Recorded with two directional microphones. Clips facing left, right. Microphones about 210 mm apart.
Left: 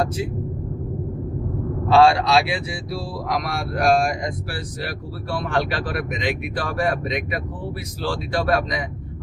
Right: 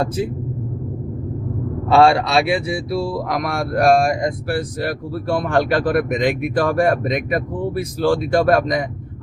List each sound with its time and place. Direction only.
1.9 s a man's voice: 55° right (ahead or behind)